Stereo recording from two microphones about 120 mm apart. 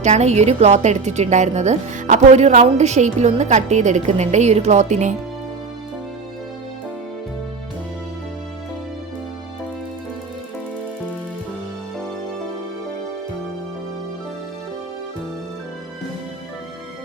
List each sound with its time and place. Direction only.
0.0 s a woman's voice: 70° right (ahead or behind)